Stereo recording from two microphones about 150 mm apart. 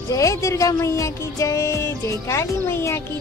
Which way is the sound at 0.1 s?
20° left (ahead or behind).